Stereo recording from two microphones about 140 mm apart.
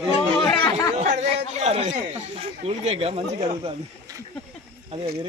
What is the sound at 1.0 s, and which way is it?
Speech, 55° right (ahead or behind).